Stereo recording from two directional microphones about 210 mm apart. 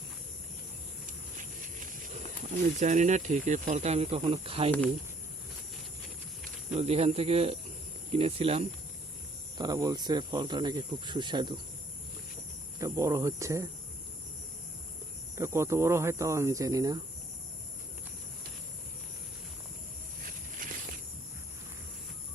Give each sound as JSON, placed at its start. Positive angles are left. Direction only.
{"t": 2.7, "sound": "speech", "side_deg": -35}
{"t": 6.7, "sound": "speech", "side_deg": -30}
{"t": 9.6, "sound": "speech", "side_deg": -15}
{"t": 12.8, "sound": "speech", "side_deg": -15}
{"t": 15.4, "sound": "speech", "side_deg": -15}
{"t": 20.6, "sound": "snake", "side_deg": -40}